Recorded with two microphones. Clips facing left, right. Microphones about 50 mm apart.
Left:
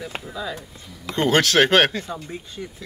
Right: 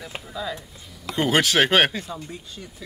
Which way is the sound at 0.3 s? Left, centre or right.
Centre.